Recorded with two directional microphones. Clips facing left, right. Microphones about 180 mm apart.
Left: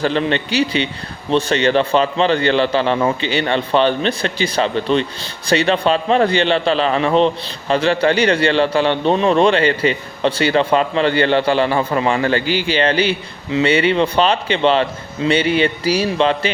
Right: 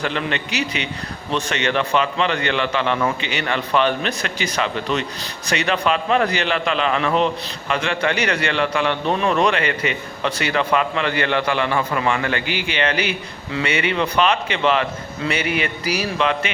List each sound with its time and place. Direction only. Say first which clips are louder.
0.0 s a man's voice: left 6 dB; 30° left (ahead or behind)